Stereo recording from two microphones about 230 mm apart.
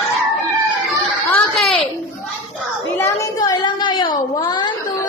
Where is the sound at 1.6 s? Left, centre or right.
Centre.